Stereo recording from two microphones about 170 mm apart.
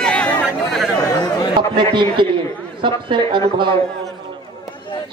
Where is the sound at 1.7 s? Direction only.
30° right (ahead or behind).